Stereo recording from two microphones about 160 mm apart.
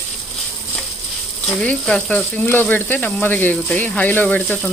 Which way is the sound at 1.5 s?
5° left (ahead or behind).